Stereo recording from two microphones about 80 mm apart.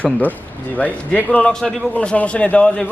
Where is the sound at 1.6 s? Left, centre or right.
Centre.